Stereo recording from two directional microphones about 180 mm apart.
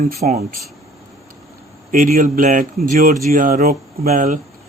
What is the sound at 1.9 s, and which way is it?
A man's voice, 50° right (ahead or behind).